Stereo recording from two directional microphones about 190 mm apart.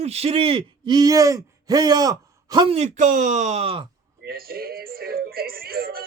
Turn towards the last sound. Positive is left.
turn(degrees=-50)  # may be behind; listen again after turning